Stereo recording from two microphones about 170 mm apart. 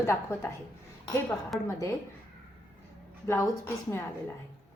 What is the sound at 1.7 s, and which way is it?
Speech, 15° left (ahead or behind).